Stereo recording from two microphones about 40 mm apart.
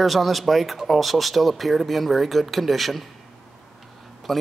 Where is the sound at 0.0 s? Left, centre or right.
Centre.